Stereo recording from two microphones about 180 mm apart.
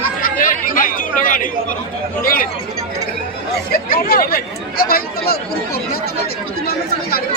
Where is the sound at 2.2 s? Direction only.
50° left (ahead or behind).